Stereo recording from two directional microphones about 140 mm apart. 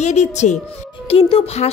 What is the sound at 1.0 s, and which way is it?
Speech, 45° left (ahead or behind).